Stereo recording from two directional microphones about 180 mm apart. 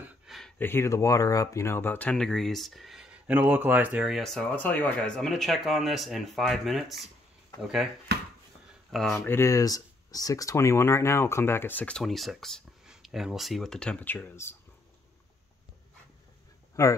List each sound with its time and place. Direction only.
0.6 s speech: 15° left (ahead or behind); by 7.9 s 5° right (ahead or behind)
8.9 s speech: centre (ahead or behind)
9.3 s speech: 15° left (ahead or behind)
16.8 s speech: 15° left (ahead or behind)